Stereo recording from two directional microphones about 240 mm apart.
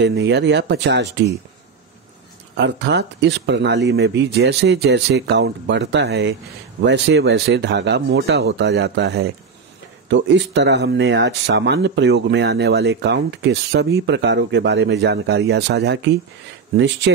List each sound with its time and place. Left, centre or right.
0.0 s speech: right
2.5 s speech: right